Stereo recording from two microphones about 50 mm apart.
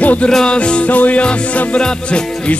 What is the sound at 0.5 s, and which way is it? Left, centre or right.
Music, left.